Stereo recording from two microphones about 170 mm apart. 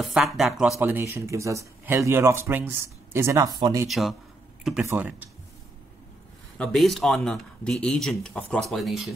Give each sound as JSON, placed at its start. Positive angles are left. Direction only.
{"t": 0.0, "sound": "speech", "side_deg": 0}
{"t": 0.7, "sound": "speech", "side_deg": -15}
{"t": 3.9, "sound": "speech", "side_deg": 0}
{"t": 4.8, "sound": "speech", "side_deg": -10}
{"t": 6.6, "sound": "speech", "side_deg": 0}